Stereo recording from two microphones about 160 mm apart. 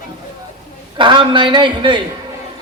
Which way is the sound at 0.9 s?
30° right (ahead or behind).